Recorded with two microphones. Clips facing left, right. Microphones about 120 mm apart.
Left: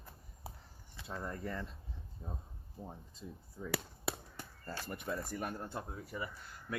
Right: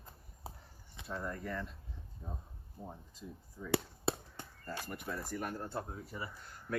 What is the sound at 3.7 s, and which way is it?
Chop, 25° right (ahead or behind).